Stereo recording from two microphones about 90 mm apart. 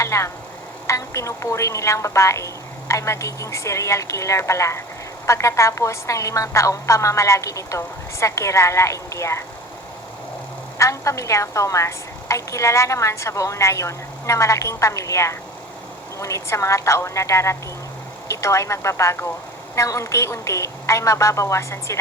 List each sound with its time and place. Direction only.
0.0 s a sound: 35° left (ahead or behind)
0.9 s a woman's voice: 35° left (ahead or behind)
10.8 s a woman's voice: 35° left (ahead or behind)